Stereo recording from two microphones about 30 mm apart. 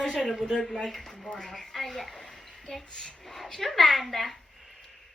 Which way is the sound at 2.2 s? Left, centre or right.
Left.